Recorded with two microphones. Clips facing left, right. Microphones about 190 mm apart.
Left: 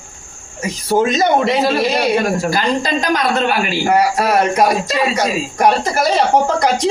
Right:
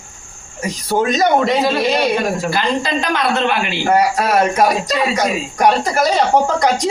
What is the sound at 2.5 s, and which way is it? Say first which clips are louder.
Speech: left 1 dB; 40° left (ahead or behind).